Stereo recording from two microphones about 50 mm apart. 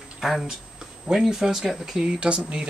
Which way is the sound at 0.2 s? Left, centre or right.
Centre.